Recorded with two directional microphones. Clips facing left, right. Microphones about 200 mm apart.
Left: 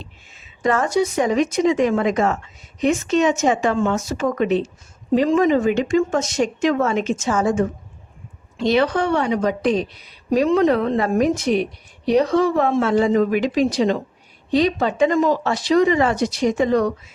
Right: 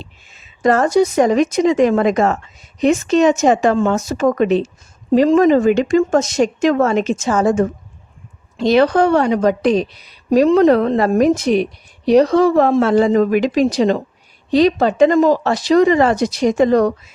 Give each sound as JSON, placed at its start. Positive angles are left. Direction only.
{"t": 0.6, "sound": "speech", "side_deg": -40}